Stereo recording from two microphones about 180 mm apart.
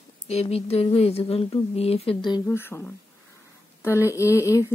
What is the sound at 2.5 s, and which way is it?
Speech, 15° left (ahead or behind).